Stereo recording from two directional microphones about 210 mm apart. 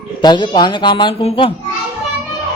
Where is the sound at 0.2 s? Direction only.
20° left (ahead or behind).